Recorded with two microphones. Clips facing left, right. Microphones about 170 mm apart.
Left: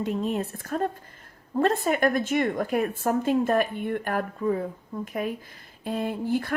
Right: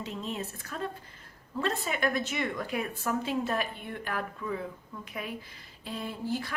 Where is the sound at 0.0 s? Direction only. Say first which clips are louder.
Left 9 dB; 50° left (ahead or behind).